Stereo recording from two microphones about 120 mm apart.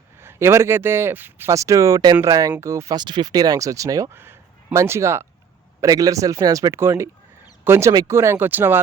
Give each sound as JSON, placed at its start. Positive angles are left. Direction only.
{"t": 0.2, "sound": "speech", "side_deg": -20}